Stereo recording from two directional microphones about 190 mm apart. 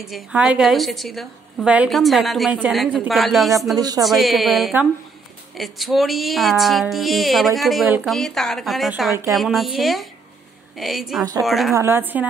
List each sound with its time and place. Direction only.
0.0 s a woman's voice: 5° right (ahead or behind)
3.7 s speech: 20° right (ahead or behind)
4.0 s a woman's voice: centre (ahead or behind)
11.7 s a woman's voice: 10° right (ahead or behind)